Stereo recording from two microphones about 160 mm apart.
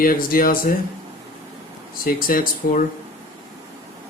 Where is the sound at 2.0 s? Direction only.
65° left (ahead or behind).